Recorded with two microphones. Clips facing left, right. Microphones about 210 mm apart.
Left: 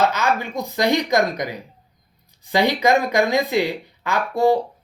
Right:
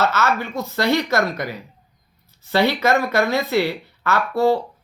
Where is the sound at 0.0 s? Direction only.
15° left (ahead or behind).